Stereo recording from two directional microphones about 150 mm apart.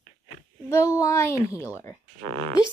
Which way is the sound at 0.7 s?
20° left (ahead or behind).